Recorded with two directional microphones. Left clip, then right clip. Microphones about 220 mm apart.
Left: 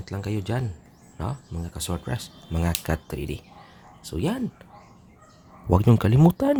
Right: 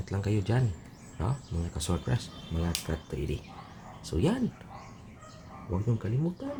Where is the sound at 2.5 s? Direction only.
30° left (ahead or behind).